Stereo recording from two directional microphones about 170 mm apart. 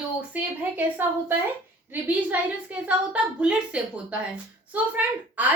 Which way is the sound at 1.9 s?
10° right (ahead or behind).